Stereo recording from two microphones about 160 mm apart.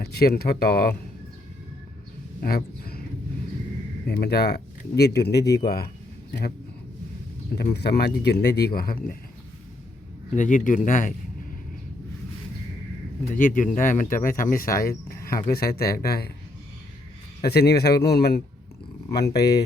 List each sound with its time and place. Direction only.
0.0 s speech: 80° left
2.4 s speech: 70° left (ahead or behind)
4.0 s speech: 90° left
7.5 s speech: 85° left; by 9.1 s 70° left (ahead or behind)
10.3 s speech: 55° left (ahead or behind)
13.3 s speech: 60° left (ahead or behind)
14.8 s a sound: 65° left (ahead or behind)
15.4 s speech: 75° left (ahead or behind)
17.4 s speech: 85° left
19.1 s speech: 90° left